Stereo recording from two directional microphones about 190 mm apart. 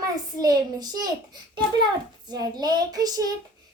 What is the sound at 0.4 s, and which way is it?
Speech, 20° right (ahead or behind).